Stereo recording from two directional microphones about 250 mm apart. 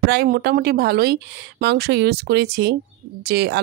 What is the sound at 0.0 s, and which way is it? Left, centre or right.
Speech, right.